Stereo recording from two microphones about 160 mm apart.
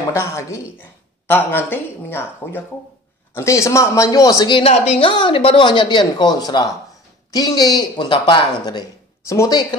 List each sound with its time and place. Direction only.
0.1 s speech: 15° left (ahead or behind)